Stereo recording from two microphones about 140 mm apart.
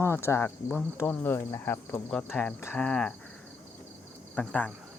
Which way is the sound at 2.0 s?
5° left (ahead or behind).